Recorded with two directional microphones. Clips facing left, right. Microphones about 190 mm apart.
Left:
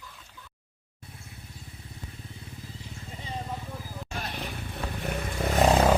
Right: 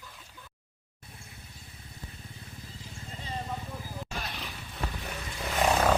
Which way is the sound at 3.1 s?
10° left (ahead or behind).